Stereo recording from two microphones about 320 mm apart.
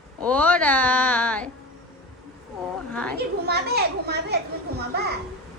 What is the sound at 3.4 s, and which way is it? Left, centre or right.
Speech, right.